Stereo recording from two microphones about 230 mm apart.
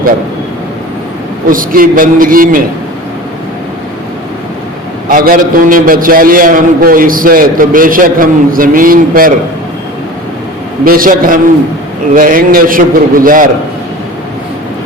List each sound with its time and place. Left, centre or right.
1.5 s a man's voice: right
5.0 s a man's voice: right
10.8 s a man's voice: right